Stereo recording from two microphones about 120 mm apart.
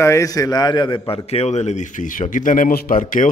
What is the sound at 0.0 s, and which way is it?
A man's voice, 25° left (ahead or behind).